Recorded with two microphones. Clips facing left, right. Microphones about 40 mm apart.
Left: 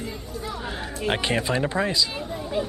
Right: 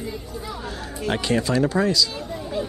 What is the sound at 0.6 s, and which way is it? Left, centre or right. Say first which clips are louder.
Speech: even; left.